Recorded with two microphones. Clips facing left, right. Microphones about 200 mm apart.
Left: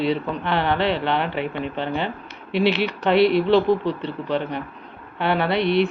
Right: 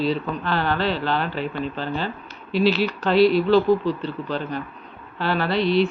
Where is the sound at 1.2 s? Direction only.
65° left (ahead or behind).